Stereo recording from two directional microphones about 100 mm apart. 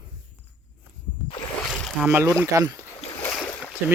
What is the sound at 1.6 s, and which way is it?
Boat, 10° left (ahead or behind).